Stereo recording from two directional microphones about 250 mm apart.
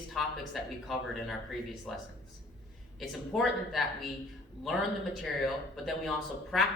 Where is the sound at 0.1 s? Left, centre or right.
Centre.